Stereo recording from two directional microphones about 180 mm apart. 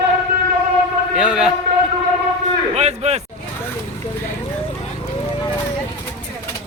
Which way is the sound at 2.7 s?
35° right (ahead or behind).